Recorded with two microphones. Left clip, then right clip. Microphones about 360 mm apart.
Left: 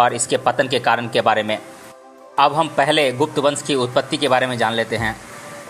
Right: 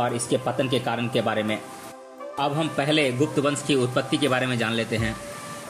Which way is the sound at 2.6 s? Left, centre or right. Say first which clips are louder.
Left 6 dB; centre.